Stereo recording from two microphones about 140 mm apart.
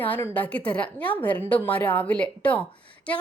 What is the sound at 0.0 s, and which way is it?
A woman's voice, 10° left (ahead or behind).